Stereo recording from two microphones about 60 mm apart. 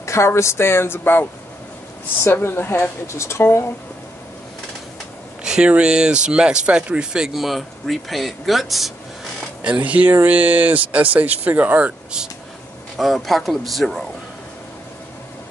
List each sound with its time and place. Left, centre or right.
0.0 s speech: left
2.2 s a woman's voice: left
3.2 s speech: left
5.4 s speech: centre
7.3 s speech: centre
9.6 s speech: right
12.9 s speech: centre